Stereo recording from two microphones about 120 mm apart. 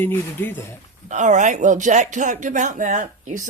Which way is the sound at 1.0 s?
90° right.